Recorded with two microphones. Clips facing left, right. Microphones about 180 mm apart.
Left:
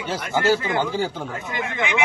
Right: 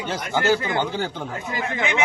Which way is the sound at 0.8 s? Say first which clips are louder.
Left 2 dB; 5° left (ahead or behind).